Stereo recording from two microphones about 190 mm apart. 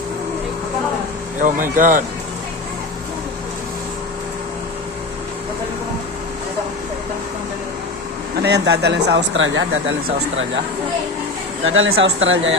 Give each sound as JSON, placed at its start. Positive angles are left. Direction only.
{"t": 1.4, "sound": "speech", "side_deg": -45}
{"t": 8.4, "sound": "speech", "side_deg": -60}
{"t": 11.6, "sound": "speech", "side_deg": -90}